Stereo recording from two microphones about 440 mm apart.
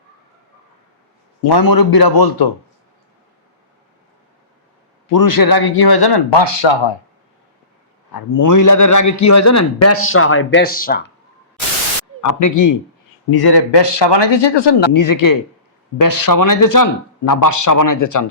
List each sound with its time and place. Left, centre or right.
1.4 s speech: left
5.0 s speech: left
8.1 s a man's voice: left
12.2 s a man's voice: left
13.3 s a man's voice: left
14.9 s speech: left